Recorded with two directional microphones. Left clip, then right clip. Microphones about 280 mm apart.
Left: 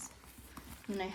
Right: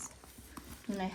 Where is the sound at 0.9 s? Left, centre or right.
Left.